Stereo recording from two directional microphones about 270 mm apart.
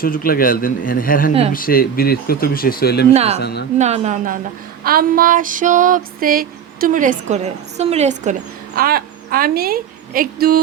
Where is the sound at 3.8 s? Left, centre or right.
Right.